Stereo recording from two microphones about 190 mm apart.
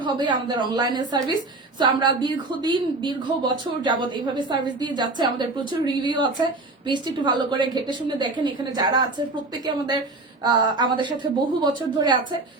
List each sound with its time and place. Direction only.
0.0 s a woman's voice: 25° right (ahead or behind)
10.4 s a woman's voice: 20° right (ahead or behind)